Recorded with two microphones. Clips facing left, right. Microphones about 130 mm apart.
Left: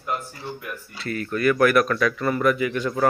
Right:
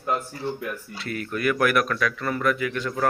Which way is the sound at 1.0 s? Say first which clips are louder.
Left 4 dB; 5° right (ahead or behind).